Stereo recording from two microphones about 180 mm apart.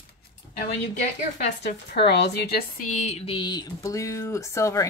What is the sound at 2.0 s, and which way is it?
Speech, 70° left (ahead or behind).